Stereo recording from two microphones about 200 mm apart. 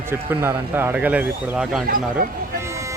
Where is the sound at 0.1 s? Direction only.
10° right (ahead or behind).